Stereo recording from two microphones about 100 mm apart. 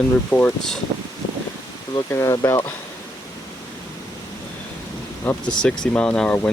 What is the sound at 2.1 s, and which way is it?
Speech, 30° left (ahead or behind).